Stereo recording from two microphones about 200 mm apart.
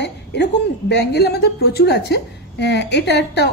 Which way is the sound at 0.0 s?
60° left (ahead or behind).